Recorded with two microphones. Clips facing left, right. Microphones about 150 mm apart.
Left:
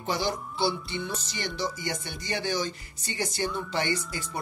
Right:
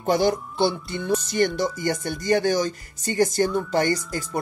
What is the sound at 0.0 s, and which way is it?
Speech, 50° right (ahead or behind).